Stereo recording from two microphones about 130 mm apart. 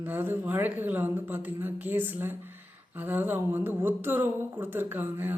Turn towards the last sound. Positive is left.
turn(degrees=-15)  # may be behind; listen again after turning